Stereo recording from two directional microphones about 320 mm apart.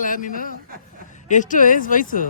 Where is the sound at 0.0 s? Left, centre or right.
Left.